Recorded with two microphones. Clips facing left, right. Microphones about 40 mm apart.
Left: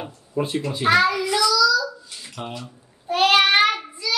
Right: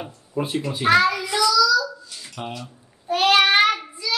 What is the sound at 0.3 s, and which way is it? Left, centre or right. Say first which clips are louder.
Speech: left 1 dB; centre.